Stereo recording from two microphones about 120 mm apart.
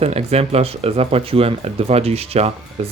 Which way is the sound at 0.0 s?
60° right (ahead or behind).